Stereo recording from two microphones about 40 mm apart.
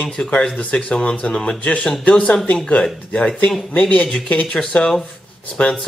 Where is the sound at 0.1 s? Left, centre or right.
Centre.